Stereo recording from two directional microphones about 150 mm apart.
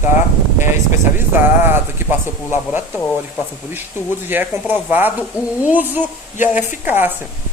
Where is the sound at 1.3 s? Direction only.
15° right (ahead or behind).